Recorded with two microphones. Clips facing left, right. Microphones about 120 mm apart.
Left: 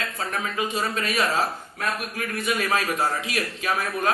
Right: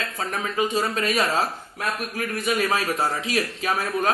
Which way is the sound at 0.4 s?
25° right (ahead or behind).